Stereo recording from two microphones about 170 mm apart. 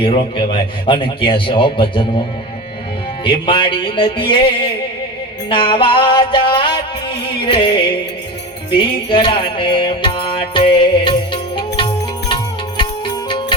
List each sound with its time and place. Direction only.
0.0 s music: 35° left (ahead or behind)
3.4 s music: 30° left (ahead or behind)
9.0 s music: 30° left (ahead or behind)